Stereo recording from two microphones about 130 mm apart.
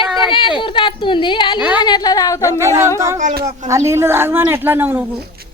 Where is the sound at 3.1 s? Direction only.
70° right (ahead or behind).